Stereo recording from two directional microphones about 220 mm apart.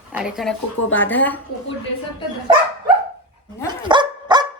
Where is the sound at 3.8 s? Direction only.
20° right (ahead or behind).